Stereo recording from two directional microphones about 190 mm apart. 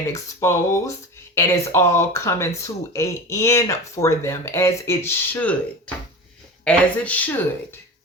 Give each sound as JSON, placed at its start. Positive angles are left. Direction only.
{"t": 0.1, "sound": "speech", "side_deg": 15}
{"t": 6.7, "sound": "speech", "side_deg": 5}